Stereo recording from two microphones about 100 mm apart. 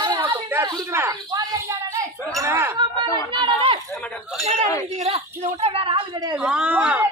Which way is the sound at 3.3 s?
55° right (ahead or behind).